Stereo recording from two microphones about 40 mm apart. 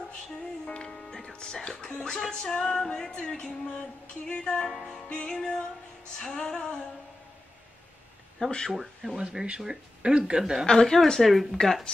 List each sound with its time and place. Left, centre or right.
0.7 s music: left
1.9 s female singing: left
2.2 s music: centre
3.2 s female singing: left
5.3 s music: centre
6.3 s female singing: centre
8.4 s female singing: left
8.7 s speech: centre
10.7 s music: centre